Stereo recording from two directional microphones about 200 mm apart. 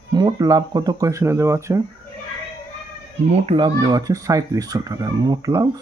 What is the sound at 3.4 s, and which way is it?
Speech, 30° right (ahead or behind).